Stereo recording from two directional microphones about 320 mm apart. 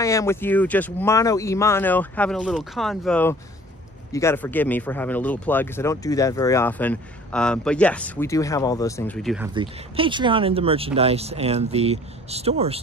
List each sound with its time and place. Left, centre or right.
0.0 s speech: centre
9.5 s speech: centre